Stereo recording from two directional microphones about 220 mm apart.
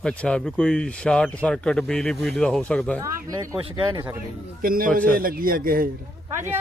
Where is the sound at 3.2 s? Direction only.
15° right (ahead or behind).